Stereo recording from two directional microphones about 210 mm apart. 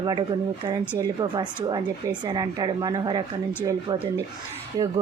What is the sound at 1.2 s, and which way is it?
Speech, 20° right (ahead or behind).